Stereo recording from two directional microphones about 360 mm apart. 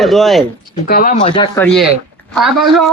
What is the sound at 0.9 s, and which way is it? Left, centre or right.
Speech, left.